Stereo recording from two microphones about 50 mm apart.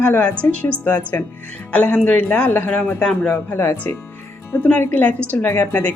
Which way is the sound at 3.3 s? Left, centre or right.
Left.